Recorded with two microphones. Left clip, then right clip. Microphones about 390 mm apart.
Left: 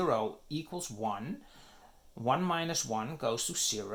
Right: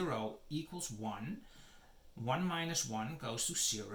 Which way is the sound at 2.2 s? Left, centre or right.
Centre.